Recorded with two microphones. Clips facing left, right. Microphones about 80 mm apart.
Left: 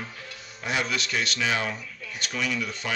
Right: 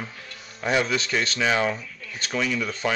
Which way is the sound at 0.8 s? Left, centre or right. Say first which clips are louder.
Even; right.